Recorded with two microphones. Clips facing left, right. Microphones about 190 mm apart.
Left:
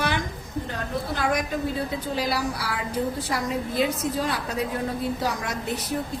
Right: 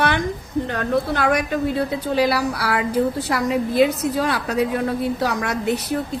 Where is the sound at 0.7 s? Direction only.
70° right (ahead or behind).